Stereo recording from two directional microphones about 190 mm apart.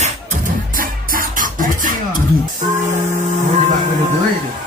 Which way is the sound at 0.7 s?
45° right (ahead or behind).